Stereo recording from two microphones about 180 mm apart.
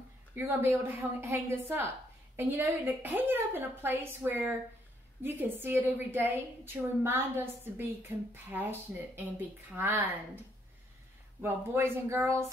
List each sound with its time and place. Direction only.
0.3 s a woman's voice: 15° right (ahead or behind)
11.4 s a woman's voice: 15° right (ahead or behind)